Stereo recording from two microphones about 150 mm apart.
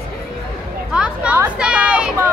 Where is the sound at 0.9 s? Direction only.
10° right (ahead or behind).